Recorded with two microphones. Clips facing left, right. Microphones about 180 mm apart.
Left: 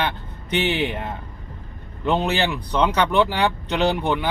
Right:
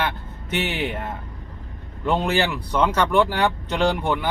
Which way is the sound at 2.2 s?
20° left (ahead or behind).